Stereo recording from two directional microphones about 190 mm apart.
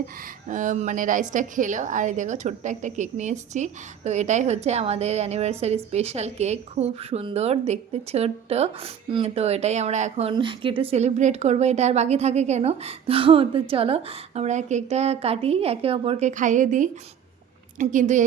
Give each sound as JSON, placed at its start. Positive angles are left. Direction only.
{"t": 0.4, "sound": "a woman's voice", "side_deg": -40}